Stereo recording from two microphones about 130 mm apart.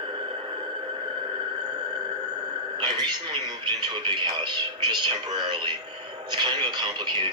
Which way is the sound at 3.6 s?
35° right (ahead or behind).